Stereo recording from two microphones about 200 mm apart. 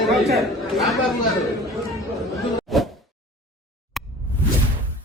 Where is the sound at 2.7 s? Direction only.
Centre (ahead or behind).